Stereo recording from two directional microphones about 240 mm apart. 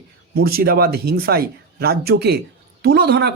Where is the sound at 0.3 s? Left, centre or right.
Right.